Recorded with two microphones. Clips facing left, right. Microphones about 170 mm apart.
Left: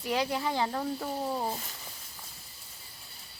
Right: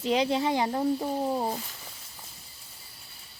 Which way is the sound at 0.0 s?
20° right (ahead or behind).